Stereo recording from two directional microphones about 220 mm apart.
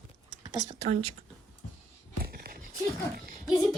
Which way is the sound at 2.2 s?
45° right (ahead or behind).